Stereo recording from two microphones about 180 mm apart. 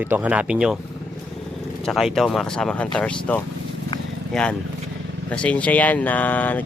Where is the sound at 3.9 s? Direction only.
25° left (ahead or behind).